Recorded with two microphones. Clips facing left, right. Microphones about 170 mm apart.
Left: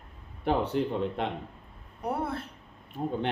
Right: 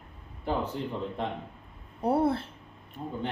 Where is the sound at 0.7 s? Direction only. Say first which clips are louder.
Left 6 dB; 75° left (ahead or behind).